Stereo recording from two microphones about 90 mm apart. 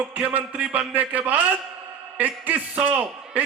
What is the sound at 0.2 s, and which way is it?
A man's voice, 15° right (ahead or behind).